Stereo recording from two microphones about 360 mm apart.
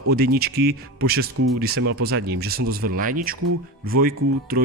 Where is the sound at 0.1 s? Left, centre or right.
Right.